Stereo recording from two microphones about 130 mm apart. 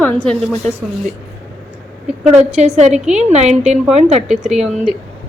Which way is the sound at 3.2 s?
55° right (ahead or behind).